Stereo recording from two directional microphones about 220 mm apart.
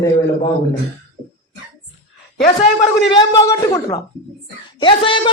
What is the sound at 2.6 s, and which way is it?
A man's voice, 20° left (ahead or behind).